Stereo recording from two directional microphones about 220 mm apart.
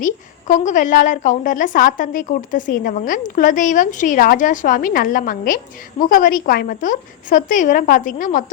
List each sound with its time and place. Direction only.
0.0 s a woman's voice: 35° left (ahead or behind)